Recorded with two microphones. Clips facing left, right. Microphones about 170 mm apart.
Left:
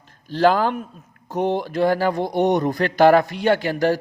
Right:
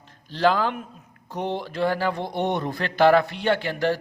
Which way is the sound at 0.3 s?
45° left (ahead or behind).